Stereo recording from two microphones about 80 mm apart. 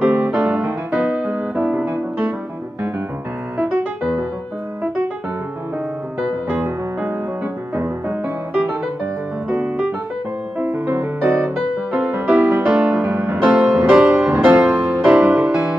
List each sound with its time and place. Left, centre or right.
0.0 s music: centre
6.5 s music: right
9.5 s music: centre
10.6 s music: right